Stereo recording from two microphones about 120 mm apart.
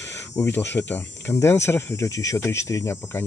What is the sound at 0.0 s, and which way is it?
Speech, 20° left (ahead or behind).